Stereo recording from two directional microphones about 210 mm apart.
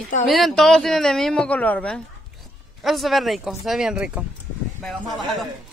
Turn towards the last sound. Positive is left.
turn(degrees=0)  # may be behind; listen again after turning